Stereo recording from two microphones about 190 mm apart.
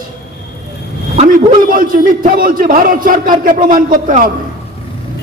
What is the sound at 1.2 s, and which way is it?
A man's voice, 45° right (ahead or behind).